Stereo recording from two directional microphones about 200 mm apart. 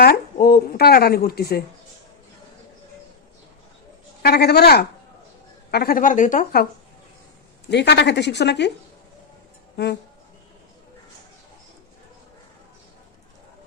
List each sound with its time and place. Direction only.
0.0 s a sound: 50° left (ahead or behind)
4.2 s a woman's voice: 55° left (ahead or behind)
7.7 s a woman's voice: 60° left (ahead or behind)
9.7 s a woman's voice: 55° left (ahead or behind)